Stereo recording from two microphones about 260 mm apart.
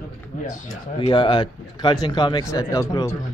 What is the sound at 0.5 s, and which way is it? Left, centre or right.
Speech, centre.